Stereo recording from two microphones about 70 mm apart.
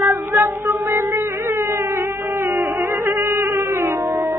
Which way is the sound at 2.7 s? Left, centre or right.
Right.